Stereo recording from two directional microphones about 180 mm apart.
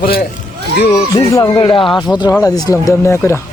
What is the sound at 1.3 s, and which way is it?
Speech, 20° left (ahead or behind).